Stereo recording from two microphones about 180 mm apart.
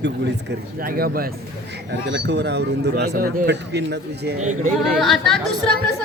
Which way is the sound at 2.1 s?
75° right (ahead or behind).